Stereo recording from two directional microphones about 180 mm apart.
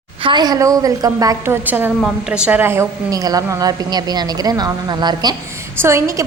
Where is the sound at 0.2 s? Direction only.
25° right (ahead or behind).